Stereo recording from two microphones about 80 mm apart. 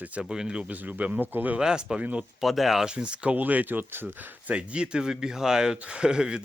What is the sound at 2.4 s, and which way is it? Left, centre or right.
Speech, centre.